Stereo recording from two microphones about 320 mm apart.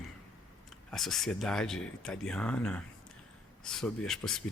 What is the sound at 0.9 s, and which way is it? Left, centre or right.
Speech, centre.